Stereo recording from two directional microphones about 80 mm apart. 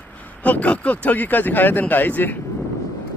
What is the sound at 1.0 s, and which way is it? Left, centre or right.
Speech, left.